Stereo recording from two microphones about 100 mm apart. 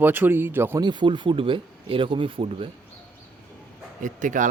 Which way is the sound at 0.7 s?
50° right (ahead or behind).